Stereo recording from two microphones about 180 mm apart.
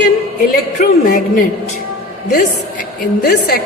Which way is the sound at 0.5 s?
50° left (ahead or behind).